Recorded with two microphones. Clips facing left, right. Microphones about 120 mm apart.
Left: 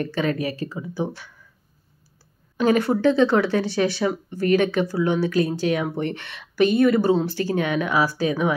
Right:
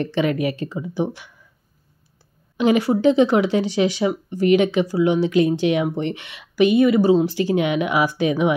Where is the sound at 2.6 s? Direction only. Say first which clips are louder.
Right 2 dB; 15° right (ahead or behind).